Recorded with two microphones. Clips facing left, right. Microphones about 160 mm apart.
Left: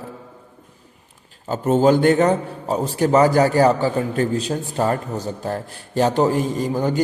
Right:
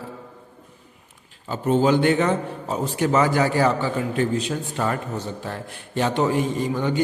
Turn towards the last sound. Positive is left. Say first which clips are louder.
# left 2 dB
turn(degrees=40)  # may be behind; listen again after turning